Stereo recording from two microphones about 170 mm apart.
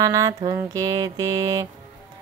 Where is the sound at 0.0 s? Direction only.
20° right (ahead or behind).